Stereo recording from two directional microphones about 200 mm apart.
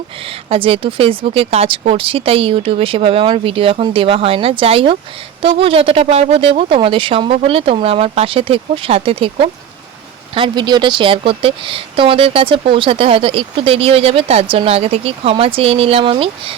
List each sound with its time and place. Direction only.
0.5 s a woman's voice: 25° right (ahead or behind)